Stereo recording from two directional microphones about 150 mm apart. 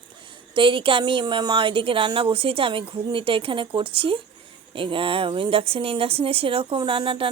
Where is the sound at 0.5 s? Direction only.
35° right (ahead or behind).